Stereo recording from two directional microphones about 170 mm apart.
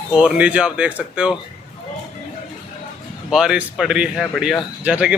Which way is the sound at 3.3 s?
5° right (ahead or behind).